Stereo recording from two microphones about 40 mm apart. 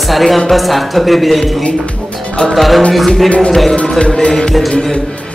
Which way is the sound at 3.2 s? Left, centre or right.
Left.